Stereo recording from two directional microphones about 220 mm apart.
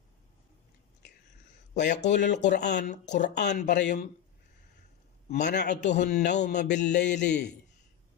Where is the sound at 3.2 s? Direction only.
50° left (ahead or behind).